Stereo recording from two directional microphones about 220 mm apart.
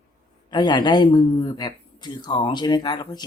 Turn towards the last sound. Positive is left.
turn(degrees=20)  # may be behind; listen again after turning